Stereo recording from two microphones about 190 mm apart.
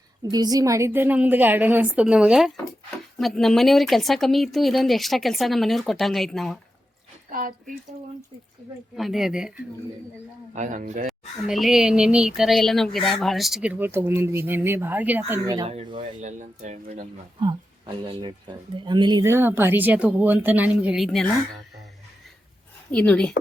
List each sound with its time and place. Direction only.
0.2 s speech: 20° right (ahead or behind); by 6.6 s centre (ahead or behind)
7.3 s speech: 45° right (ahead or behind)
9.0 s speech: centre (ahead or behind)
10.5 s speech: 40° right (ahead or behind)
11.4 s speech: centre (ahead or behind)
15.5 s speech: 30° right (ahead or behind)
16.0 s speech: 40° right (ahead or behind)
17.4 s speech: 25° right (ahead or behind); by 21.2 s centre (ahead or behind)
22.9 s speech: 5° left (ahead or behind)